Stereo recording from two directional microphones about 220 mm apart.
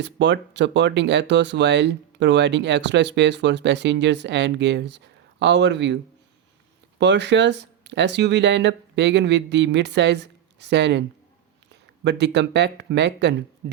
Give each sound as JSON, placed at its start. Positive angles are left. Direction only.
{"t": 0.0, "sound": "speech", "side_deg": -50}
{"t": 7.0, "sound": "speech", "side_deg": -50}